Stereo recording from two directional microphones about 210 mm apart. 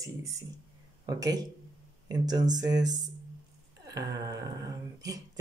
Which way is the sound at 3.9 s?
15° right (ahead or behind).